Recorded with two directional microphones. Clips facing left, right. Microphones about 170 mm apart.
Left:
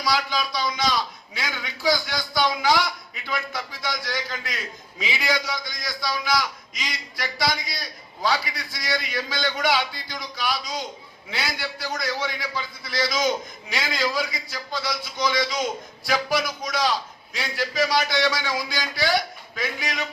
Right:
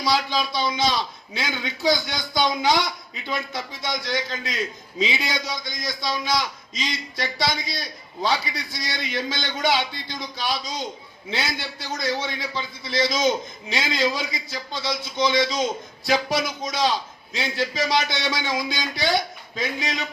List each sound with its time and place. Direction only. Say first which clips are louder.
0.0 s a man's voice: right 2 dB; 25° right (ahead or behind)